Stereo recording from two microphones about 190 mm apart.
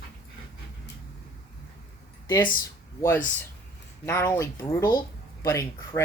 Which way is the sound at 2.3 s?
25° left (ahead or behind).